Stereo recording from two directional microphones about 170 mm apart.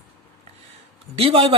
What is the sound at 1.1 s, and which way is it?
Speech, 35° right (ahead or behind).